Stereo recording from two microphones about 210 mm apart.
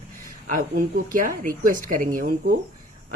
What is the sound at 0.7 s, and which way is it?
Speech, 40° right (ahead or behind).